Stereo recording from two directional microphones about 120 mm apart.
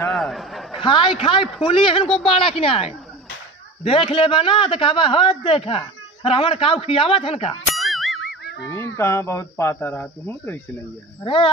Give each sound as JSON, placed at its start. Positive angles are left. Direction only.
{"t": 0.1, "sound": "speech", "side_deg": 0}
{"t": 0.7, "sound": "a man's voice", "side_deg": 45}
{"t": 7.7, "sound": "music", "side_deg": 0}
{"t": 8.6, "sound": "speech", "side_deg": 20}
{"t": 11.2, "sound": "a man's voice", "side_deg": 45}